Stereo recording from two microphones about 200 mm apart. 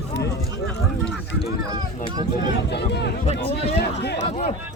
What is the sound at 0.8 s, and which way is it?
Speech, centre (ahead or behind).